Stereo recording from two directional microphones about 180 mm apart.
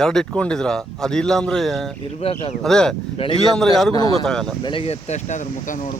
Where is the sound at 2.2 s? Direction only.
35° left (ahead or behind).